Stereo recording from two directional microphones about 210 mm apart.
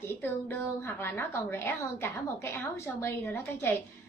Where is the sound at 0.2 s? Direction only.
10° left (ahead or behind).